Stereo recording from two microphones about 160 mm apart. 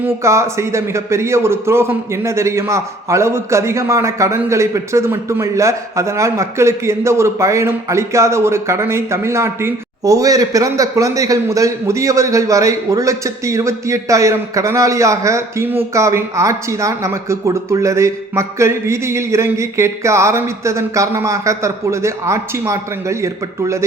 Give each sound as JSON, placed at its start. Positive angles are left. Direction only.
{"t": 0.0, "sound": "a man's voice", "side_deg": -15}